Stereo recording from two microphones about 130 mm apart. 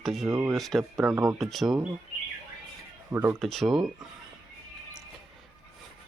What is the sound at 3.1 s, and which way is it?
Speech, 15° right (ahead or behind).